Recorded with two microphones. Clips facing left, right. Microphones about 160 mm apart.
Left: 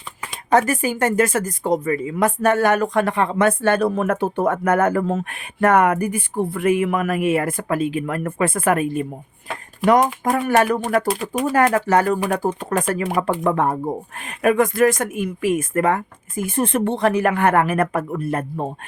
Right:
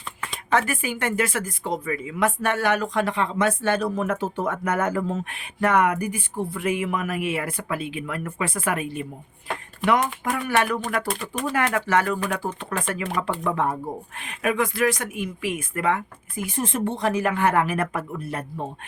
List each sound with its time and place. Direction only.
0.5 s speech: 40° left (ahead or behind)